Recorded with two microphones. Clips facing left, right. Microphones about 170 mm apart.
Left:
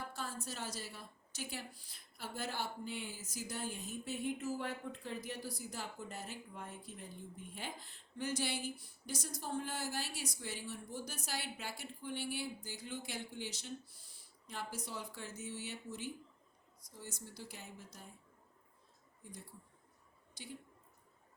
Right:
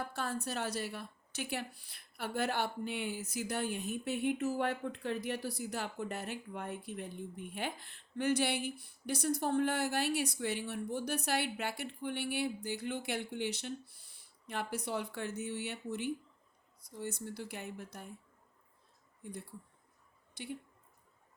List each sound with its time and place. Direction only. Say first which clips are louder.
0.1 s a woman's voice: right 7 dB; 65° right (ahead or behind)
19.2 s a woman's voice: right 8 dB; 60° right (ahead or behind)